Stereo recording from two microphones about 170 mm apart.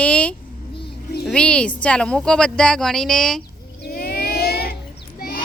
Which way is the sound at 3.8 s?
60° left (ahead or behind).